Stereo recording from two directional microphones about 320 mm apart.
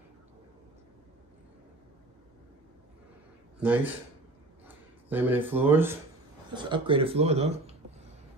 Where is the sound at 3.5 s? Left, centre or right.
Centre.